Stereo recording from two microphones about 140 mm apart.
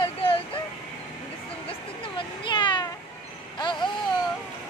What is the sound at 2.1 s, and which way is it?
Speech, 35° left (ahead or behind).